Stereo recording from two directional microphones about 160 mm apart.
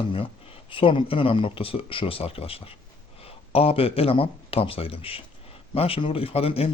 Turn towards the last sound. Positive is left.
turn(degrees=35)  # may be behind; listen again after turning